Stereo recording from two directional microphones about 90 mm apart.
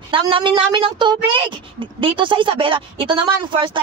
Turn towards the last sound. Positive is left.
turn(degrees=-65)  # may be behind; listen again after turning